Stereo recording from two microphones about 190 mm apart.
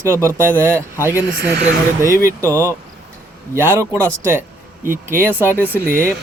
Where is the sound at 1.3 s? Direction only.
55° right (ahead or behind).